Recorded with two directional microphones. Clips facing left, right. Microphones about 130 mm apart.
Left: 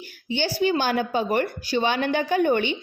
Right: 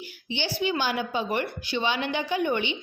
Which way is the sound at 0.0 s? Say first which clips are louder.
Left 5 dB; 45° left (ahead or behind).